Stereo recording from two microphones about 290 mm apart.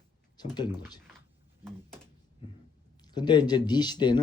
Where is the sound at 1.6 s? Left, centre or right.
Centre.